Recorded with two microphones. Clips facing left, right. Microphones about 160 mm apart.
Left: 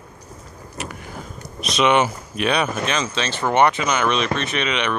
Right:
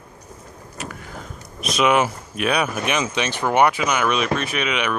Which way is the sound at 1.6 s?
5° right (ahead or behind).